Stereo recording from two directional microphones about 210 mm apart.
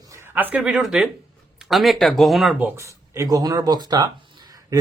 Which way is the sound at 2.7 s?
15° right (ahead or behind).